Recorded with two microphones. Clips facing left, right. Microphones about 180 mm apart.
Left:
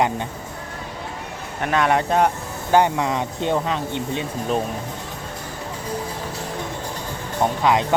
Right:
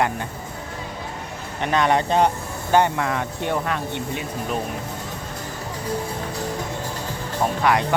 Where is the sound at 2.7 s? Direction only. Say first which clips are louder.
Left 1 dB; 15° left (ahead or behind).